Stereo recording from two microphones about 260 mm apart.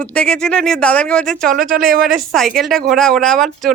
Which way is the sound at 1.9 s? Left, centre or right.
Right.